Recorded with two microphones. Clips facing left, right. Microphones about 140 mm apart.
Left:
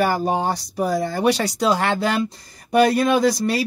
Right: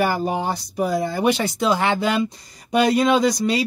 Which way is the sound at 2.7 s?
15° right (ahead or behind).